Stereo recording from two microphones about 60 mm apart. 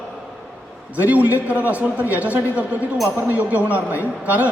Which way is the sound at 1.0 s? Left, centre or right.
Right.